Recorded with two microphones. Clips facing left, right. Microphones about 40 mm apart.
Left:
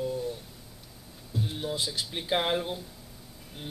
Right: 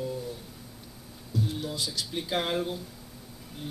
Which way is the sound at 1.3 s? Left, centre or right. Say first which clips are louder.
Even; left.